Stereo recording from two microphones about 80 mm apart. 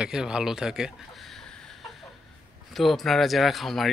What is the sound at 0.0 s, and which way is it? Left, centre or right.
Chicken, centre.